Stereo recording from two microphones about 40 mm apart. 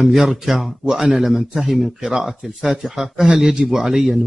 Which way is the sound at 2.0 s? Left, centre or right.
Centre.